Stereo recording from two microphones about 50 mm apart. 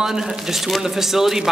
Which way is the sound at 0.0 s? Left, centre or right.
Centre.